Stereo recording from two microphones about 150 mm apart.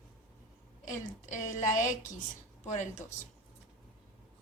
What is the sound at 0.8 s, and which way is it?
A woman's voice, 55° left (ahead or behind).